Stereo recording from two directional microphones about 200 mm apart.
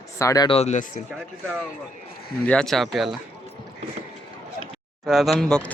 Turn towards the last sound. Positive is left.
turn(degrees=5)  # may be behind; listen again after turning